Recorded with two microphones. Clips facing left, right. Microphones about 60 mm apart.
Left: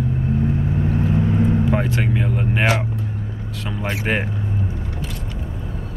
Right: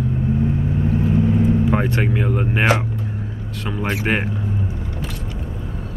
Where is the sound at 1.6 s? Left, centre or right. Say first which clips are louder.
Right 1 dB; centre.